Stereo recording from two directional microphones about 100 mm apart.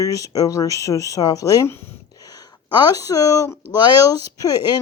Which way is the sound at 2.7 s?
35° left (ahead or behind).